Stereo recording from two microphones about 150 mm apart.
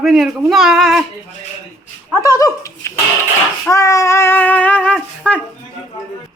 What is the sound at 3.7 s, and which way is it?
Child singing, 20° left (ahead or behind).